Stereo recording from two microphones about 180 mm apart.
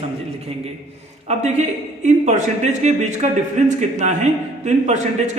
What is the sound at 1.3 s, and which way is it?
A man's voice, 40° right (ahead or behind).